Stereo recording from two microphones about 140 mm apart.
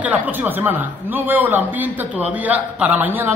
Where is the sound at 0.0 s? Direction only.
10° right (ahead or behind).